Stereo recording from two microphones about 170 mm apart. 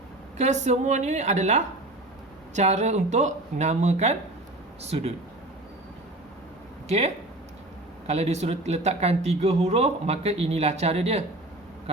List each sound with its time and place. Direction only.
0.3 s speech: 45° right (ahead or behind)
6.8 s speech: 40° right (ahead or behind)